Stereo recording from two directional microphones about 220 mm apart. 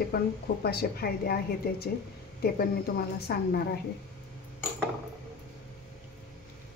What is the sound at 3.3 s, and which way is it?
Speech, 45° left (ahead or behind).